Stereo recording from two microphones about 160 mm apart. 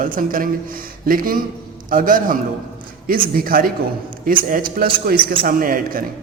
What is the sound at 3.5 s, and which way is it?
A man's voice, 65° right (ahead or behind).